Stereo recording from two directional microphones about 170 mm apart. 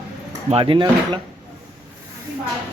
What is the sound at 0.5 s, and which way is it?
Speech, 30° right (ahead or behind).